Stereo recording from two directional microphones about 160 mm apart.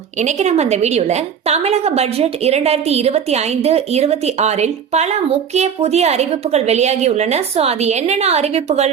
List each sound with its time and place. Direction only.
0.2 s a woman's voice: 45° right (ahead or behind)